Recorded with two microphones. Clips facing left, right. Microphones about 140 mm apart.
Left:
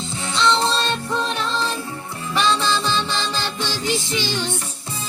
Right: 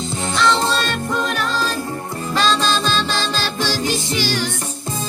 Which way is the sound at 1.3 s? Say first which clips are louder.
Right 2 dB; 25° left (ahead or behind).